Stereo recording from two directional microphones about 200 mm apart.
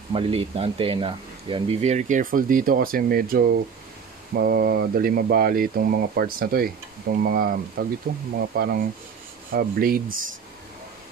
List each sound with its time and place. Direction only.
0.1 s speech: 30° right (ahead or behind); by 10.1 s 45° right (ahead or behind)